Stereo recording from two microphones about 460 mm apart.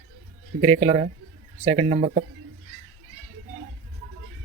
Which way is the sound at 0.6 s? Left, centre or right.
Centre.